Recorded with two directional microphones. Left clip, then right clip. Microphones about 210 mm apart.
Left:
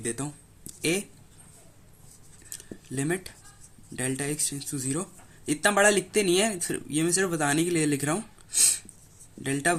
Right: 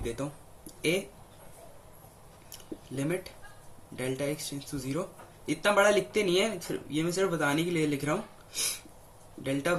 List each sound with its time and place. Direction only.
0.0 s speech: 45° left (ahead or behind)
2.9 s speech: 40° left (ahead or behind)